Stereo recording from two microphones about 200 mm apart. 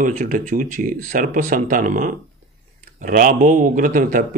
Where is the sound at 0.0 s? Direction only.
40° right (ahead or behind).